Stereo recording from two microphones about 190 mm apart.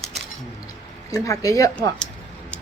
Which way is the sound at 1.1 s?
15° left (ahead or behind).